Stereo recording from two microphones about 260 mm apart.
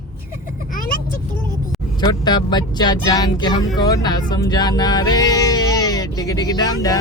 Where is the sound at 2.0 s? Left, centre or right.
Centre.